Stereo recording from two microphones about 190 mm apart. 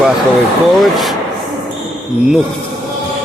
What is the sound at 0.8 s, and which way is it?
Speech, centre (ahead or behind).